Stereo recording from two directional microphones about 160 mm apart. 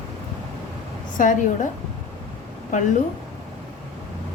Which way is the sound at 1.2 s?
55° left (ahead or behind).